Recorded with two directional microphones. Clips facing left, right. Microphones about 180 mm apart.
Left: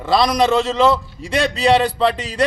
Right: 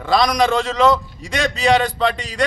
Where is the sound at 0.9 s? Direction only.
30° left (ahead or behind).